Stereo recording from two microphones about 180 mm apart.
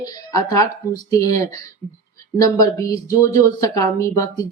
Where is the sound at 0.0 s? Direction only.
20° left (ahead or behind).